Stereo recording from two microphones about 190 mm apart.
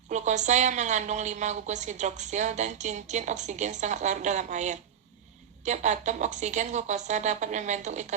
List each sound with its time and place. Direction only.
0.1 s a woman's voice: 40° right (ahead or behind)